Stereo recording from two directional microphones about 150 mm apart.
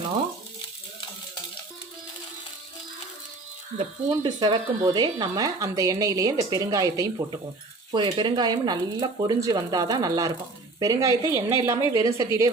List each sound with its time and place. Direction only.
4.2 s speech: 30° right (ahead or behind)
7.9 s speech: 30° right (ahead or behind)